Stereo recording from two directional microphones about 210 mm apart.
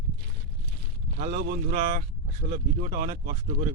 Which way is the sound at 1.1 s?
40° right (ahead or behind).